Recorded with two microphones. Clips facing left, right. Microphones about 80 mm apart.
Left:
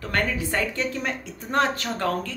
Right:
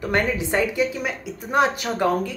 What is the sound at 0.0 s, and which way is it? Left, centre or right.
Speech, centre.